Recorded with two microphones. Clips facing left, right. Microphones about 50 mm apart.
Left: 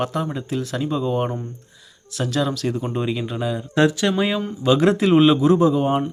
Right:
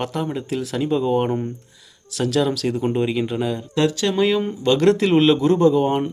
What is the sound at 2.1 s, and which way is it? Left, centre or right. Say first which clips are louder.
Speech: right 3 dB; centre.